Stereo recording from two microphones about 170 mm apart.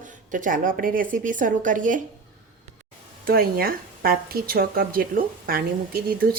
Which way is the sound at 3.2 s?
60° right (ahead or behind).